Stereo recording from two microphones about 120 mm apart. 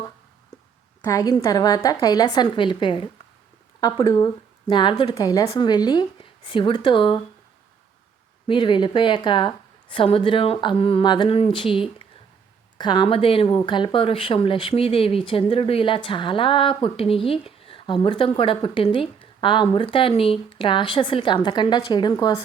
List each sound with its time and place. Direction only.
1.0 s a woman's voice: 30° left (ahead or behind); by 7.2 s 45° left (ahead or behind)
8.4 s speech: 45° left (ahead or behind)